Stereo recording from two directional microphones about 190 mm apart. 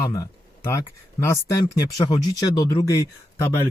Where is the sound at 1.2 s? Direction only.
15° left (ahead or behind).